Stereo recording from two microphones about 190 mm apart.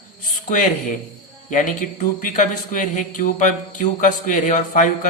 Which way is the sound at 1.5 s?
45° left (ahead or behind).